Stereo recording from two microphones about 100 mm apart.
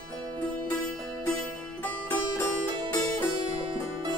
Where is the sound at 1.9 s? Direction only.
20° left (ahead or behind).